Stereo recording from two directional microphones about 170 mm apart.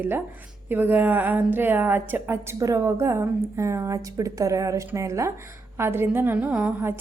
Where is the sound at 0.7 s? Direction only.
10° right (ahead or behind).